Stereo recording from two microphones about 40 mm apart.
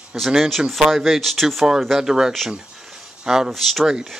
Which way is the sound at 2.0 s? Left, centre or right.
Centre.